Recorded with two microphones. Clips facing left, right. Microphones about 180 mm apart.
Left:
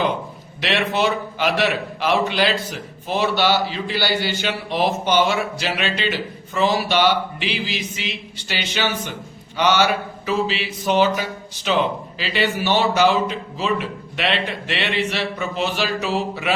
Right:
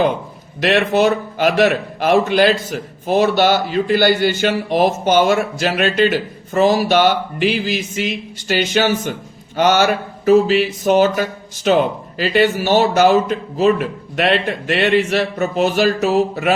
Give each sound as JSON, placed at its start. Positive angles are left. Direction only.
{"t": 0.6, "sound": "a man's voice", "side_deg": -45}